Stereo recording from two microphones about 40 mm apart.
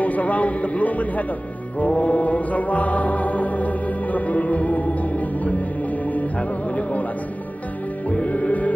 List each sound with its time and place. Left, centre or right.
0.0 s speech: left
1.8 s music: left
8.1 s music: left